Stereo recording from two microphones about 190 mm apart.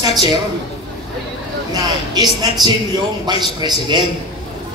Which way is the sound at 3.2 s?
20° right (ahead or behind).